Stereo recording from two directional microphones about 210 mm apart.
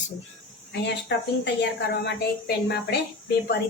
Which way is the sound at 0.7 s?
55° left (ahead or behind).